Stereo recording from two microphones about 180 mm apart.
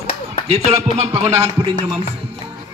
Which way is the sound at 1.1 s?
35° right (ahead or behind).